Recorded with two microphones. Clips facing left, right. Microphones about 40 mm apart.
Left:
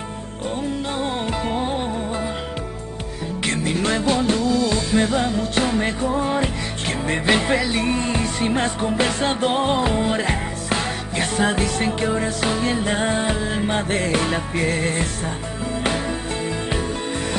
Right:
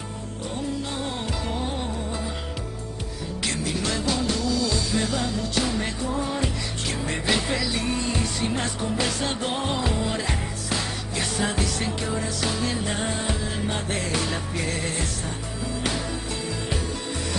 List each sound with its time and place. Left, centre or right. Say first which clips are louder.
0.9 s music: left 6 dB; left
3.4 s music: left 6 dB; left